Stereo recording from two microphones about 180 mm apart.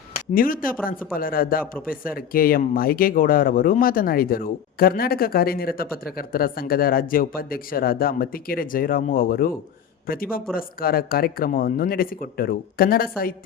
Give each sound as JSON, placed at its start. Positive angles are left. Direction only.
{"t": 0.3, "sound": "a man's voice", "side_deg": 50}